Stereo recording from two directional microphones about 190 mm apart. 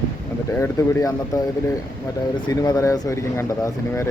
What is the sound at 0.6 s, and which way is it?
Speech, 15° left (ahead or behind).